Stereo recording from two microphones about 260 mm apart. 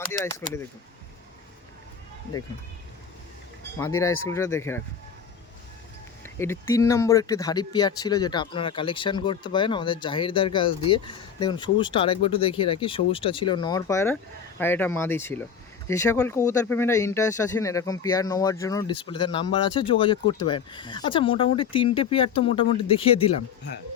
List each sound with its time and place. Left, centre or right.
0.1 s speech: centre
3.8 s speech: centre
6.2 s speech: centre